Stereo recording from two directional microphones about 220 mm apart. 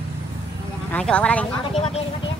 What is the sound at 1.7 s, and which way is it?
Speech, 30° left (ahead or behind).